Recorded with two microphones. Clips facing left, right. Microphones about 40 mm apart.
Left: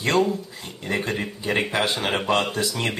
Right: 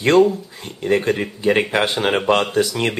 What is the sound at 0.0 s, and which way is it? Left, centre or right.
Speech, right.